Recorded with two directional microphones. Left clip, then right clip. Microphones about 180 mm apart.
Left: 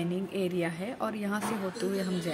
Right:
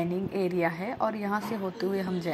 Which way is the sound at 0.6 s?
15° left (ahead or behind).